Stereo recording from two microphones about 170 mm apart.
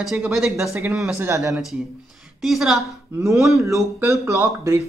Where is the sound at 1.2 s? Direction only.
20° right (ahead or behind).